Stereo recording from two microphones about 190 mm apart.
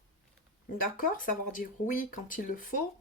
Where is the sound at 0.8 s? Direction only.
45° left (ahead or behind).